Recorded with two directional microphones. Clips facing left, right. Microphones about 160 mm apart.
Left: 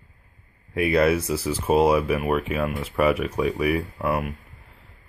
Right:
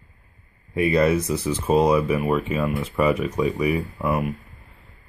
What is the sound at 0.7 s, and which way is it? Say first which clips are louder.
Speech: right 1 dB; 5° left (ahead or behind).